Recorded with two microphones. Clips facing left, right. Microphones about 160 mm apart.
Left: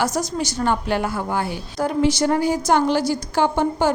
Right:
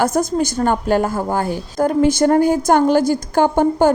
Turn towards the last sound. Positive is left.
turn(degrees=-50)  # may be behind; listen again after turning